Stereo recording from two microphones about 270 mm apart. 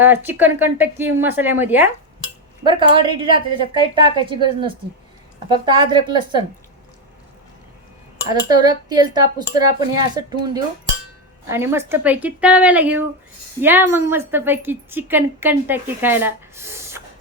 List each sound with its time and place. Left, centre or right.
0.0 s a woman's voice: centre
2.6 s a woman's voice: centre
5.5 s a woman's voice: centre
8.3 s a woman's voice: centre